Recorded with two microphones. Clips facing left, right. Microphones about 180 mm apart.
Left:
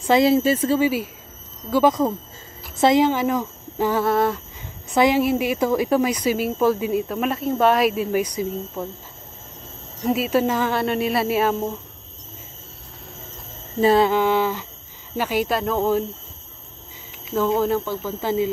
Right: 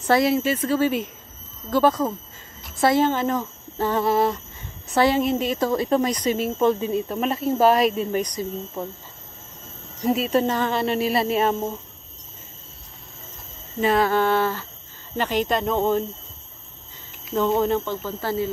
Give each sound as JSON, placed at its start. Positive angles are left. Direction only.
{"t": 0.2, "sound": "speech", "side_deg": 30}
{"t": 0.7, "sound": "a woman's voice", "side_deg": 5}
{"t": 4.0, "sound": "speech", "side_deg": 0}
{"t": 4.9, "sound": "speech", "side_deg": 15}
{"t": 10.0, "sound": "speech", "side_deg": 5}
{"t": 13.7, "sound": "speech", "side_deg": 30}
{"t": 14.0, "sound": "a woman's voice", "side_deg": 15}
{"t": 17.3, "sound": "speech", "side_deg": 0}